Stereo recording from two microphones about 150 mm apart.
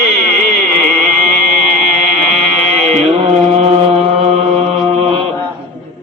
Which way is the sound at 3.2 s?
45° right (ahead or behind).